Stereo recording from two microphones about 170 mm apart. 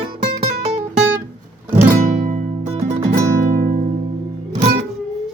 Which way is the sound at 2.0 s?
45° right (ahead or behind).